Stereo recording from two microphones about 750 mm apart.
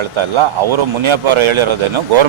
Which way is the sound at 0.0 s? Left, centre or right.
Right.